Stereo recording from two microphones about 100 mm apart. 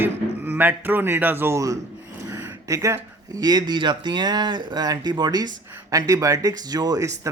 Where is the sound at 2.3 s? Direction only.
30° right (ahead or behind).